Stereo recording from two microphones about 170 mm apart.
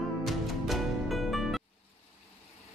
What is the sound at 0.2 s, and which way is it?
Music, centre (ahead or behind).